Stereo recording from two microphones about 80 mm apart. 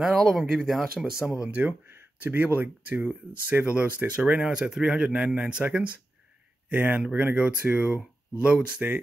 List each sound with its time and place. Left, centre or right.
0.3 s speech: centre
1.4 s speech: centre